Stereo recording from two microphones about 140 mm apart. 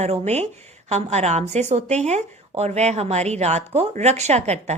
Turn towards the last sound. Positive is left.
turn(degrees=-50)  # may be behind; listen again after turning